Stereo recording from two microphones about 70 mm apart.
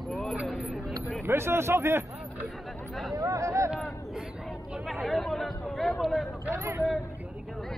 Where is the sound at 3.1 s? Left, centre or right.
Right.